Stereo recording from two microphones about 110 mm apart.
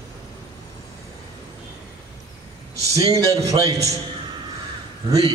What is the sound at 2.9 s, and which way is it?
Speech, 30° right (ahead or behind).